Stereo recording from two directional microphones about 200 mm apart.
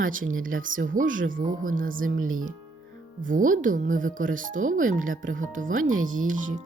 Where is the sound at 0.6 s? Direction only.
40° right (ahead or behind).